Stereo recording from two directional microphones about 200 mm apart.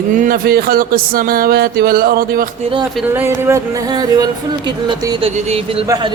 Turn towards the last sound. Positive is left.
turn(degrees=-20)  # may be behind; listen again after turning